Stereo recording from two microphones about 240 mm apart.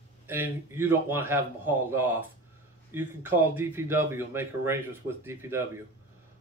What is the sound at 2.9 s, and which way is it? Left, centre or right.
Speech, centre.